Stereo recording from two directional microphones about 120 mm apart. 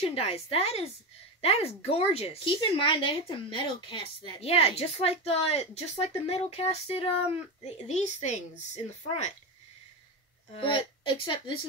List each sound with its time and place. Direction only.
0.0 s speech: 60° left (ahead or behind)
10.6 s a woman's voice: 45° left (ahead or behind)